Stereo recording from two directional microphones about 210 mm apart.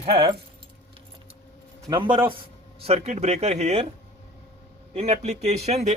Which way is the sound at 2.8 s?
30° right (ahead or behind).